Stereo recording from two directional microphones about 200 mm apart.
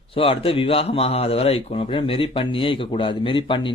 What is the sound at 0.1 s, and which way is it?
Speech, 25° left (ahead or behind).